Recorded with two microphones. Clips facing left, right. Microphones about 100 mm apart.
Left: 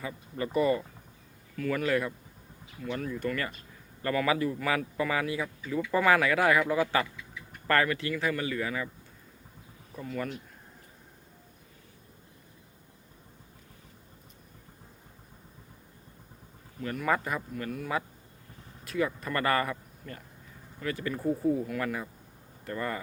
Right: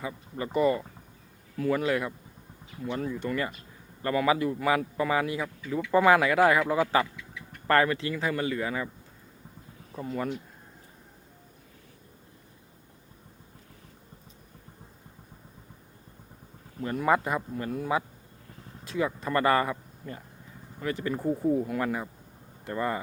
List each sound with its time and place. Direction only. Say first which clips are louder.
0.3 s speech: right 1 dB; 20° right (ahead or behind)
9.9 s speech: right 3 dB; 25° right (ahead or behind)
16.8 s speech: right 4 dB; 25° right (ahead or behind)
21.2 s speech: right 1 dB; 10° right (ahead or behind)
21.7 s speech: right 3 dB; 25° right (ahead or behind)